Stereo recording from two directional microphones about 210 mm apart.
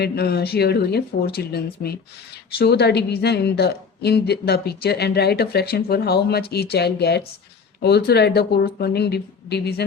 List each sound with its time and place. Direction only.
0.0 s a woman's voice: 50° left (ahead or behind)